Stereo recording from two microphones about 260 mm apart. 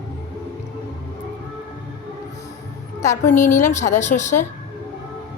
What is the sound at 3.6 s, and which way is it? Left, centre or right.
Speech, left.